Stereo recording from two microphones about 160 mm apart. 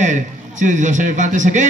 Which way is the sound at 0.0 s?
50° right (ahead or behind).